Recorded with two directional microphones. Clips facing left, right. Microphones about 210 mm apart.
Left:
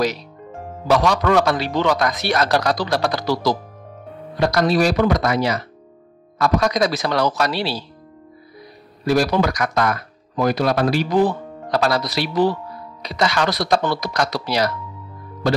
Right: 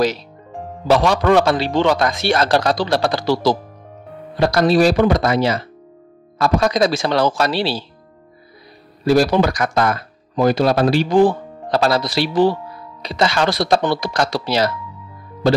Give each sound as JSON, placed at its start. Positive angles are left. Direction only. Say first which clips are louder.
{"t": 0.8, "sound": "speech", "louder": "right 3 dB", "side_deg": -30}
{"t": 9.0, "sound": "speech", "louder": "right 3 dB", "side_deg": -30}